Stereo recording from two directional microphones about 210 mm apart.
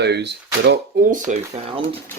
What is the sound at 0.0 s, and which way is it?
Speech, 55° right (ahead or behind).